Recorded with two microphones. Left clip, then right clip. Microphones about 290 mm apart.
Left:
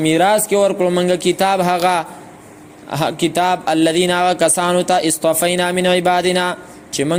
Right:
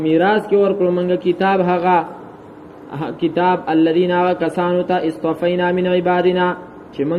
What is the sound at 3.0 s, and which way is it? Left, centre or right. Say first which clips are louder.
Speech: left 1 dB; left.